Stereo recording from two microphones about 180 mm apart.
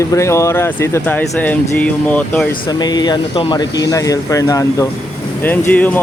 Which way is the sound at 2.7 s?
20° left (ahead or behind).